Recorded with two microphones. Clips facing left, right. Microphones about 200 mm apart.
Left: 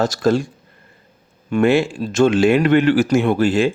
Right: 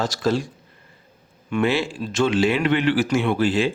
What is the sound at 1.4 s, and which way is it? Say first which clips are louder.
A man's voice: left 6 dB; 45° left (ahead or behind).